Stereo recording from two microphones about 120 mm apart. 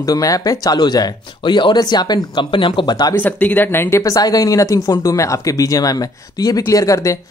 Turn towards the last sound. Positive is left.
turn(degrees=30)  # may be behind; listen again after turning